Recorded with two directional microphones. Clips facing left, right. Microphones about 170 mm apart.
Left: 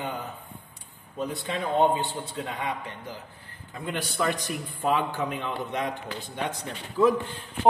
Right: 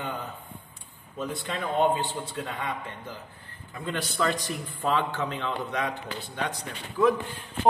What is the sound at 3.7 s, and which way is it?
A man's voice, 15° left (ahead or behind).